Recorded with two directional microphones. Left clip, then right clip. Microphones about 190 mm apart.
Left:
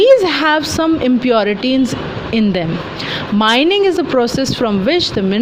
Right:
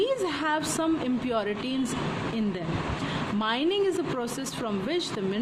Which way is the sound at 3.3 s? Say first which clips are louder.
Left 15 dB; 40° left (ahead or behind).